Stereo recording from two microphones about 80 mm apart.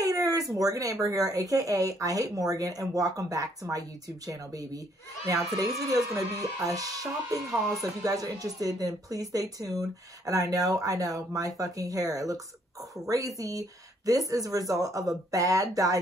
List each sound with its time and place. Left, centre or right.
0.0 s speech: right
7.4 s speech: centre
7.8 s speech: right
13.4 s speech: right